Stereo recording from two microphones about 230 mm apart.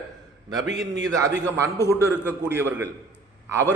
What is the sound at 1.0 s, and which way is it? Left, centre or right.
A man's voice, centre.